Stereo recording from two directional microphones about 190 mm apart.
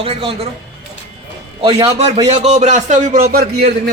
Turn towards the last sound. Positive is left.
turn(degrees=-55)  # may be behind; listen again after turning